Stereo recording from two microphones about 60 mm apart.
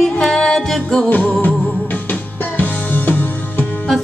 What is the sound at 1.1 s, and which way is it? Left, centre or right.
Music, left.